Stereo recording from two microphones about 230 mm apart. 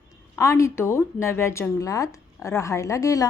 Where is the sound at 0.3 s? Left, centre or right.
Centre.